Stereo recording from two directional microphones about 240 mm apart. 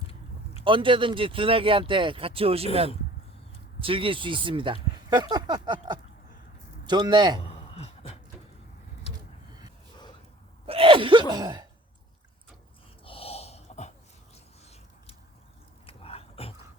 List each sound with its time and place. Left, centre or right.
0.6 s speech: right
3.8 s a man's voice: right
7.4 s a sound: left
9.1 s a sound: centre
10.7 s gasp: right
13.1 s snort: left
15.9 s dog: left